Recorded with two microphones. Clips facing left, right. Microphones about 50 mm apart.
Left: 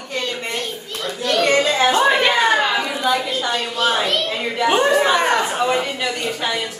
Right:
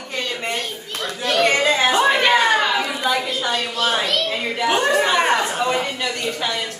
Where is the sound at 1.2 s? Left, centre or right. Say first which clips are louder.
Left 1 dB; centre.